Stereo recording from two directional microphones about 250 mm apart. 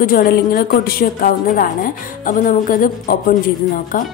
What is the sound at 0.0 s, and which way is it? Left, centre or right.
A woman's voice, left.